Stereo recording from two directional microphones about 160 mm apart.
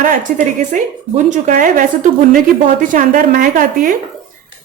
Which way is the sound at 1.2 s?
50° right (ahead or behind).